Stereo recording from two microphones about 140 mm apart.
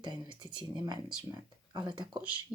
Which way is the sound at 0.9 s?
30° right (ahead or behind).